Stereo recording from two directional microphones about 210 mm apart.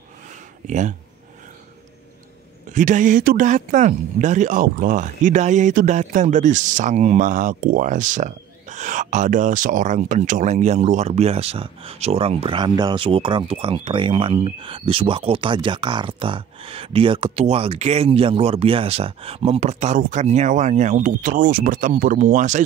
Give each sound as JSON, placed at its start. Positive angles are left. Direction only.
{"t": 0.7, "sound": "speech", "side_deg": -35}
{"t": 2.7, "sound": "speech", "side_deg": -35}